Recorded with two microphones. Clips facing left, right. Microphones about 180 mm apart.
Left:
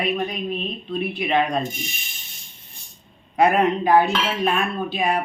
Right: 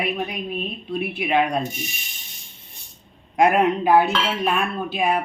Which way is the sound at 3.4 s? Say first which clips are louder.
Even; 10° right (ahead or behind).